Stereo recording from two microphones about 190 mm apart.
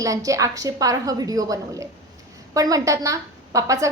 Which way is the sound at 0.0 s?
15° right (ahead or behind).